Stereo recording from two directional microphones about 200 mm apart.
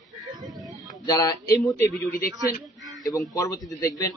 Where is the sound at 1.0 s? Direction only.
20° left (ahead or behind).